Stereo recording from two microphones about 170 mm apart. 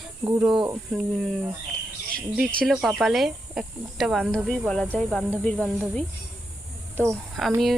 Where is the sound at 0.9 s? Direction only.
Centre (ahead or behind).